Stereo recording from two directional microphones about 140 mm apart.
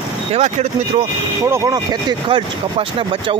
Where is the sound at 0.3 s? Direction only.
50° right (ahead or behind).